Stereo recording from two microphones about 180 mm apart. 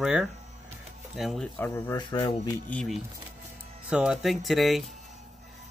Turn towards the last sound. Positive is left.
turn(degrees=0)  # may be behind; listen again after turning